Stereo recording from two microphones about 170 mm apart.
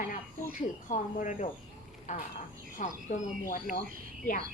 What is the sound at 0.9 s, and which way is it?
Speech, 50° left (ahead or behind).